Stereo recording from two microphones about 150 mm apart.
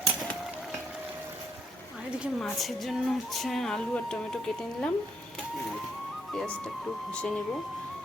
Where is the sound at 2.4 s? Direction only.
Centre (ahead or behind).